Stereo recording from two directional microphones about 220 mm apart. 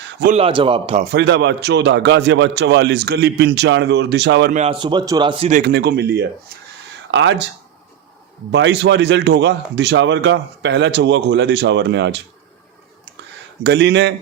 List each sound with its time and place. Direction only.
0.3 s a man's voice: 25° right (ahead or behind)
1.1 s speech: 50° right (ahead or behind)
4.5 s a man's voice: 25° right (ahead or behind)
5.5 s a man's voice: 35° right (ahead or behind)
5.7 s speech: 45° right (ahead or behind)
7.1 s speech: 55° right (ahead or behind)
8.5 s speech: 55° right (ahead or behind)
13.7 s speech: 50° right (ahead or behind)